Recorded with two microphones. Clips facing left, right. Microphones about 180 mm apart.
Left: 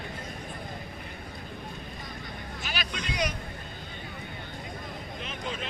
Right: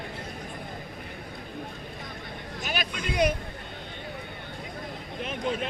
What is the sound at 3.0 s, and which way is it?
Speech, 55° right (ahead or behind).